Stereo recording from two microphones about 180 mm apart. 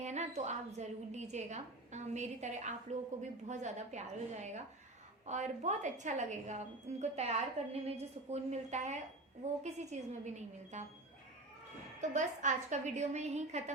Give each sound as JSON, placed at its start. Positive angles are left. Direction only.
{"t": 0.0, "sound": "a woman's voice", "side_deg": -40}
{"t": 11.9, "sound": "a woman's voice", "side_deg": -45}